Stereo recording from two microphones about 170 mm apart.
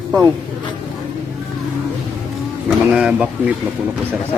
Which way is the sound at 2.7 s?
5° right (ahead or behind).